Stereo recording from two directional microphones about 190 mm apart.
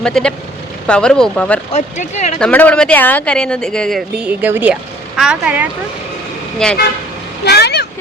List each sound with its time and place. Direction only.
0.0 s speech: 5° left (ahead or behind)
1.7 s speech: 35° left (ahead or behind)
2.4 s speech: 10° left (ahead or behind)
7.4 s vehicle: 60° left (ahead or behind)